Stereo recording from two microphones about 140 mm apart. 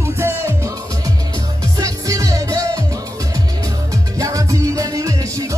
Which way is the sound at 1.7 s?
25° right (ahead or behind).